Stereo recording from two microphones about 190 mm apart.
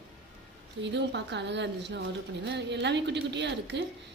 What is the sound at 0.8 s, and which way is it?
A woman's voice, 65° right (ahead or behind).